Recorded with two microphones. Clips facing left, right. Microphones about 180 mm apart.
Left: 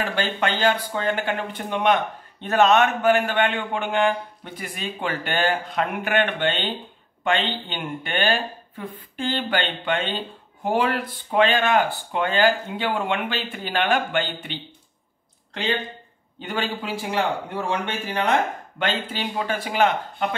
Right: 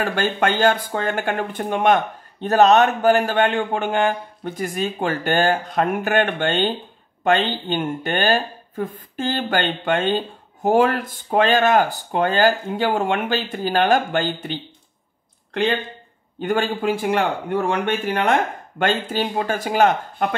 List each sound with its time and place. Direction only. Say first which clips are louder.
0.0 s a man's voice: right 4 dB; 50° right (ahead or behind)
16.3 s speech: right 6 dB; 50° right (ahead or behind)